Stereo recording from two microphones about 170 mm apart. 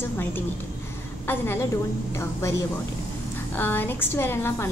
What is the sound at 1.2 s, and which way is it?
Speech, 15° left (ahead or behind).